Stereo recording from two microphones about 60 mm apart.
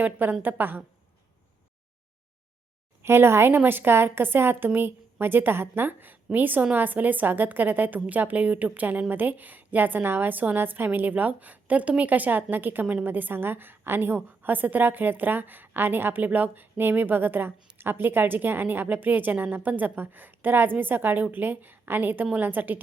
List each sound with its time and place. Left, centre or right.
0.0 s a woman's voice: right
3.0 s a woman's voice: right